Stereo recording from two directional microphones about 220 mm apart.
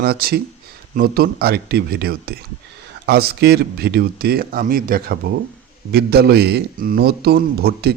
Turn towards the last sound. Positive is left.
turn(degrees=-45)  # may be behind; listen again after turning